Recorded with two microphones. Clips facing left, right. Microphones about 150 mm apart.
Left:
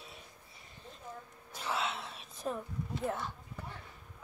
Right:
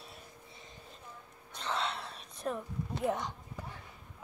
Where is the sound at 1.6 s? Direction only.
5° left (ahead or behind).